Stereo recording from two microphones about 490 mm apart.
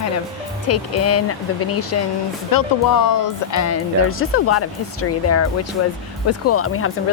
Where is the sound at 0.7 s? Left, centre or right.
Left.